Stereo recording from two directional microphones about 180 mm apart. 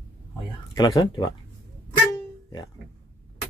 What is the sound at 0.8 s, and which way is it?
Speech, 25° left (ahead or behind).